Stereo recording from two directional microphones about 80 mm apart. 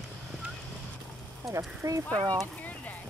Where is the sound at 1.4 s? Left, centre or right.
Right.